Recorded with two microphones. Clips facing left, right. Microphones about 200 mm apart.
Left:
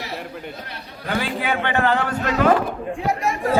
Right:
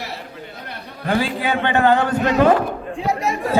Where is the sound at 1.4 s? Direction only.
20° right (ahead or behind).